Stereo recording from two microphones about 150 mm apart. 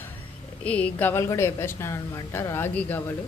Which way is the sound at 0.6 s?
10° left (ahead or behind).